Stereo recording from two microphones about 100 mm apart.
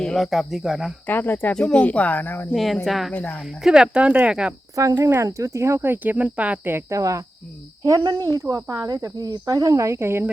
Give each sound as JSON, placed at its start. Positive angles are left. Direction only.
{"t": 0.0, "sound": "speech", "side_deg": 5}
{"t": 1.0, "sound": "speech", "side_deg": 20}
{"t": 2.5, "sound": "speech", "side_deg": 0}
{"t": 3.1, "sound": "speech", "side_deg": 15}
{"t": 3.6, "sound": "speech", "side_deg": -5}
{"t": 4.7, "sound": "speech", "side_deg": -35}
{"t": 7.9, "sound": "speech", "side_deg": -40}